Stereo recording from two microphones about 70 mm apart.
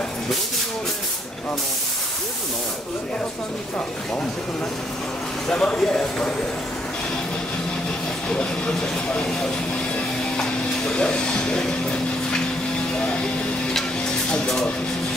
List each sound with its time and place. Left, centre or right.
5.5 s speech: centre
8.3 s speech: centre
14.3 s speech: centre